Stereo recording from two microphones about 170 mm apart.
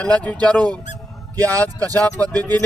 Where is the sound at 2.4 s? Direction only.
20° right (ahead or behind).